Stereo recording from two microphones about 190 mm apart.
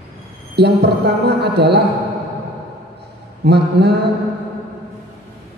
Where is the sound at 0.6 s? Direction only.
60° right (ahead or behind).